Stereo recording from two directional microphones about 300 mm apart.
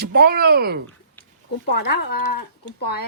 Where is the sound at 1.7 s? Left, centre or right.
Left.